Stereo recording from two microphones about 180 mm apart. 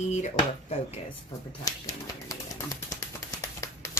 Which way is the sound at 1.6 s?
20° left (ahead or behind).